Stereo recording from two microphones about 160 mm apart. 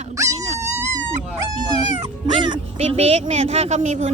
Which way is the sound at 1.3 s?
25° right (ahead or behind).